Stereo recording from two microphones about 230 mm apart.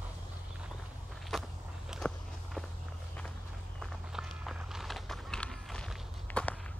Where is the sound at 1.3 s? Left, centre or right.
Centre.